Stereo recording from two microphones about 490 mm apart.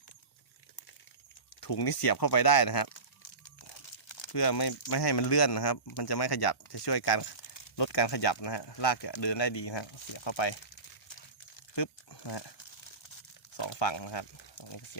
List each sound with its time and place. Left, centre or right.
1.6 s speech: left
4.1 s speech: left
11.7 s a sound: left
13.6 s speech: left